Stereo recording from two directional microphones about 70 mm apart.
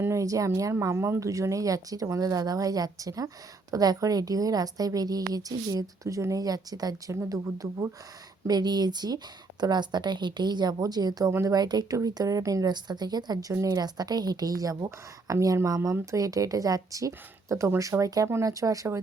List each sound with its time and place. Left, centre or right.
0.1 s a woman's voice: right
1.2 s speech: right
7.3 s a woman's voice: right
8.4 s a woman's voice: right
11.3 s a woman's voice: right
11.5 s speech: right
11.9 s speech: right
12.6 s a woman's voice: right
13.5 s a woman's voice: right